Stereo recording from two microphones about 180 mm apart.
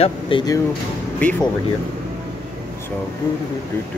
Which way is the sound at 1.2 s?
10° left (ahead or behind).